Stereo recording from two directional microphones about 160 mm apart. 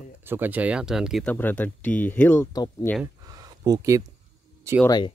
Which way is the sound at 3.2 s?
25° right (ahead or behind).